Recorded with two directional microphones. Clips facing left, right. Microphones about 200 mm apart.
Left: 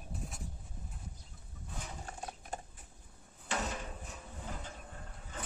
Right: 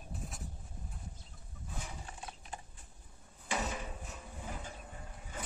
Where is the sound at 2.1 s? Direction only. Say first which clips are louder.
Left 4 dB; 45° left (ahead or behind).